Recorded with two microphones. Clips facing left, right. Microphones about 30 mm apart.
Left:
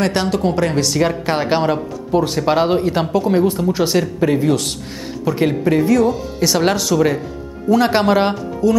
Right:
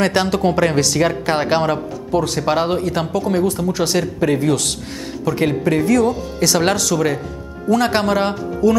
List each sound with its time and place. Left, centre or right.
0.0 s speech: centre
0.4 s a woman's voice: centre
0.9 s speech: centre
2.0 s speech: centre
2.4 s speech: centre
2.8 s speech: centre
8.6 s speech: centre